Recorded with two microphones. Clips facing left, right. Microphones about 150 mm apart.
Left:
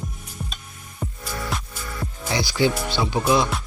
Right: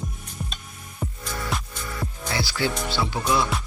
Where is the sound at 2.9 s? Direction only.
15° left (ahead or behind).